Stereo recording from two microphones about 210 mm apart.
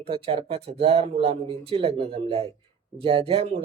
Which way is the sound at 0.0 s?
25° right (ahead or behind).